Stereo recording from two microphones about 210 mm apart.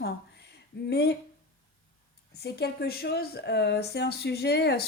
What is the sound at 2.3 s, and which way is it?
Speech, 50° left (ahead or behind).